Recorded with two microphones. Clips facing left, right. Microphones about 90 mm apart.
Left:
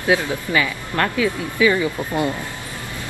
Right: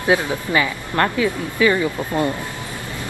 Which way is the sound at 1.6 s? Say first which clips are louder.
Even; 15° left (ahead or behind).